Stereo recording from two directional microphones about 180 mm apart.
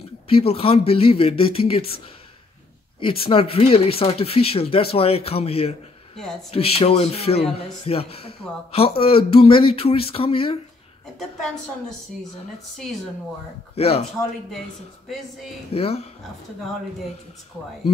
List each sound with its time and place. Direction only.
0.3 s speech: 30° left (ahead or behind)
3.0 s speech: 30° left (ahead or behind)
13.7 s speech: 35° left (ahead or behind)
15.7 s speech: 35° left (ahead or behind)